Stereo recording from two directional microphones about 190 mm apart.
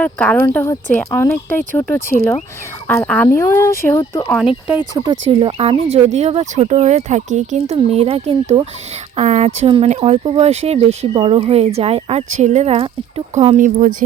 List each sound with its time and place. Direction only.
0.0 s speech: 5° left (ahead or behind)
4.3 s speech: centre (ahead or behind)
5.0 s speech: 30° right (ahead or behind)